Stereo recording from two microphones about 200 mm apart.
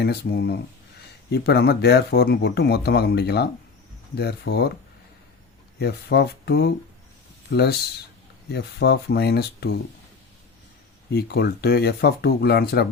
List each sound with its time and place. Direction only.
0.0 s speech: 55° left (ahead or behind)
5.8 s speech: 55° left (ahead or behind)
11.1 s speech: 55° left (ahead or behind)